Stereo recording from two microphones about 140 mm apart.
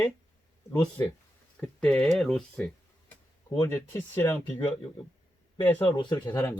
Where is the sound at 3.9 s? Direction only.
20° left (ahead or behind).